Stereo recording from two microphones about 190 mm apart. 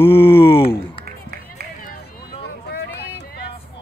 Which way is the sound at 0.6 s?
30° left (ahead or behind).